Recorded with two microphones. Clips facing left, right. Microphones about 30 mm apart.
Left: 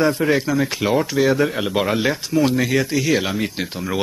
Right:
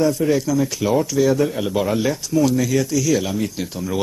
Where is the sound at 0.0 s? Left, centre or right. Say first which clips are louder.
Even; left.